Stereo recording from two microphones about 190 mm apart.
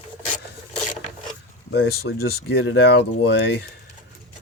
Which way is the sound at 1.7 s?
60° left (ahead or behind).